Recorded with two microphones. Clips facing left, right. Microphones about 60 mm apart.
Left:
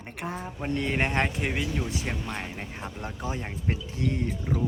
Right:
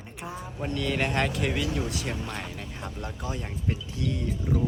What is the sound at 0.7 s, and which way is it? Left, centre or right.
Speech, left.